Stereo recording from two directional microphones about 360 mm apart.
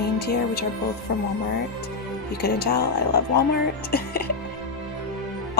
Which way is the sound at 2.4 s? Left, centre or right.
Left.